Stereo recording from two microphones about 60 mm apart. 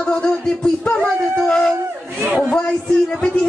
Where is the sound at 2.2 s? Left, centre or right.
Right.